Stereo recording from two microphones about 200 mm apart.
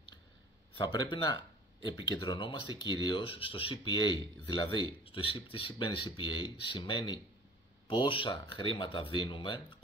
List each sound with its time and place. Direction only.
0.7 s speech: 20° left (ahead or behind)